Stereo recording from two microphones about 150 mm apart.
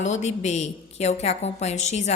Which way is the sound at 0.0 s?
50° left (ahead or behind).